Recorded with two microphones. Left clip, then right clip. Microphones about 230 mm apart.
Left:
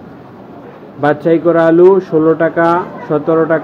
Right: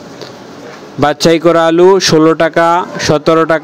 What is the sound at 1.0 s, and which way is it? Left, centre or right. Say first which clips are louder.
A man's voice: right 2 dB; right.